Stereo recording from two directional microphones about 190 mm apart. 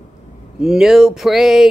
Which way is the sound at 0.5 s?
5° right (ahead or behind).